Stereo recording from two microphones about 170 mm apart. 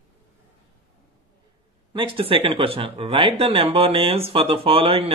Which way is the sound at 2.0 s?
30° right (ahead or behind).